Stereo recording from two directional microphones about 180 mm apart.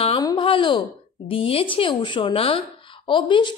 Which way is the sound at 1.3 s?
30° left (ahead or behind).